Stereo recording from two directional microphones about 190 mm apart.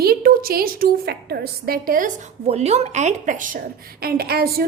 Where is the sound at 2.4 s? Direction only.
35° right (ahead or behind); by 4.6 s 55° right (ahead or behind).